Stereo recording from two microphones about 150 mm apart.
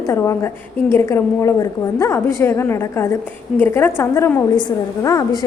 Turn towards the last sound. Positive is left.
turn(degrees=25)  # may be behind; listen again after turning